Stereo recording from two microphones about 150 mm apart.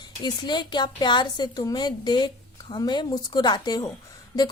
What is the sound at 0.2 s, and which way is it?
A woman's voice, 30° left (ahead or behind).